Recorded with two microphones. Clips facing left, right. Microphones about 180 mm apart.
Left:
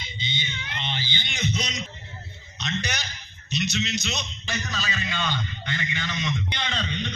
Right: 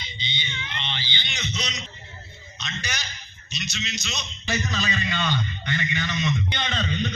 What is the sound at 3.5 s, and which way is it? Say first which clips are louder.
Speech: left 6 dB; 60° left (ahead or behind).